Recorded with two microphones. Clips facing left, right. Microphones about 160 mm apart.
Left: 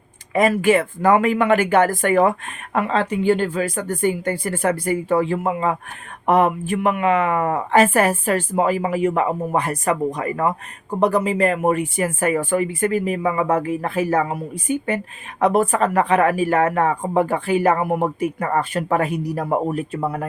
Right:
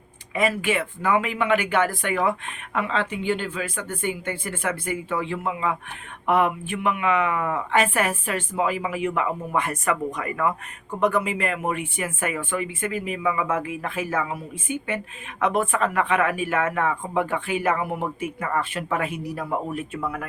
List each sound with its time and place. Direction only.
0.3 s speech: 45° left (ahead or behind)